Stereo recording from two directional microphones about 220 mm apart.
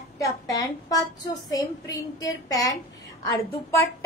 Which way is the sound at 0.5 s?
15° left (ahead or behind).